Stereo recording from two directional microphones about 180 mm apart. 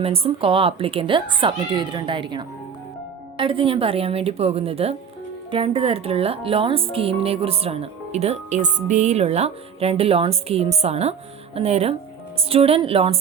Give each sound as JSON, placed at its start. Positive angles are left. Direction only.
{"t": 0.0, "sound": "speech", "side_deg": -30}